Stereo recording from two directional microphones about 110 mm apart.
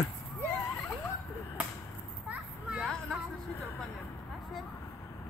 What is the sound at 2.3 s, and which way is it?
Children playing, 10° right (ahead or behind).